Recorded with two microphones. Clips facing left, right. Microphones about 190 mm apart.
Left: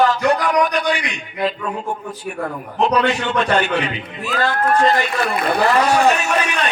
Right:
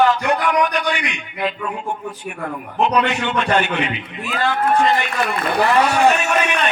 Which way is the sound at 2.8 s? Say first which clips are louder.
Left 1 dB; 35° left (ahead or behind).